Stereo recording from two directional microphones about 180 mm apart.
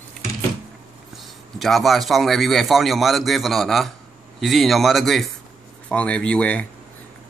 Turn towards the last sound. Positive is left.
turn(degrees=5)  # may be behind; listen again after turning